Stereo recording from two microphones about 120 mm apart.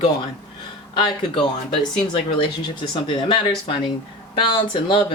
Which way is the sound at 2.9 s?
40° left (ahead or behind).